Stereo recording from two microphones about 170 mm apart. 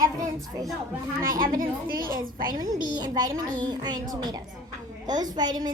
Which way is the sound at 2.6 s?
25° right (ahead or behind).